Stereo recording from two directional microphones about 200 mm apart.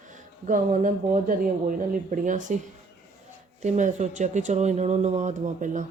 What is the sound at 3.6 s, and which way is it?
Speech, 35° right (ahead or behind).